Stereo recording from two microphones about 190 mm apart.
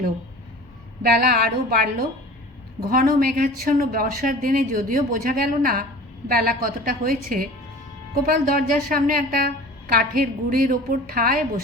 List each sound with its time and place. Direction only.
1.0 s speech: 55° right (ahead or behind)